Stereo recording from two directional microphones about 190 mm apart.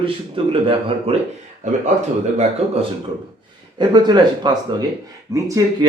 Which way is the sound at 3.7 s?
25° right (ahead or behind).